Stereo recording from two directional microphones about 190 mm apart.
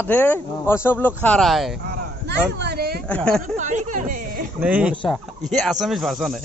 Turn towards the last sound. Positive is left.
turn(degrees=0)  # may be behind; listen again after turning